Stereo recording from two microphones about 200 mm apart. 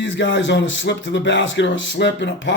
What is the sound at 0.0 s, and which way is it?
A man's voice, 65° left (ahead or behind).